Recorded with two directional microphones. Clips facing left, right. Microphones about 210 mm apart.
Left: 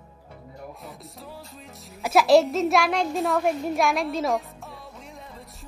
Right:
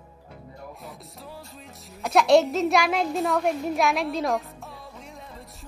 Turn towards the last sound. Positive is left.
turn(degrees=0)  # may be behind; listen again after turning